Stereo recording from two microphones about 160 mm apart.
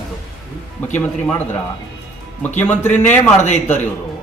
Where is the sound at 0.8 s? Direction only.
10° left (ahead or behind).